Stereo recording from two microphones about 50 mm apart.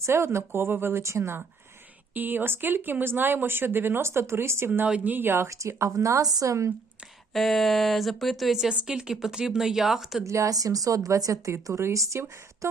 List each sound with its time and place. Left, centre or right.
0.0 s speech: right
1.0 s speech: right
2.1 s speech: right
4.9 s speech: right
5.1 s speech: right
5.5 s a woman's voice: right
7.3 s speech: centre
8.7 s speech: centre
10.2 s a woman's voice: right